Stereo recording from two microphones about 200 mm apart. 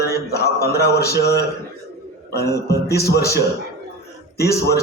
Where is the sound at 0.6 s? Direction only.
50° left (ahead or behind).